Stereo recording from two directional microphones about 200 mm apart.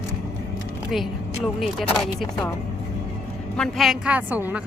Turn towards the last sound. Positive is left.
turn(degrees=-10)  # may be behind; listen again after turning